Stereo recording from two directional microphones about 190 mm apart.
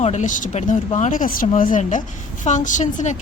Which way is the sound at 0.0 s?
40° left (ahead or behind).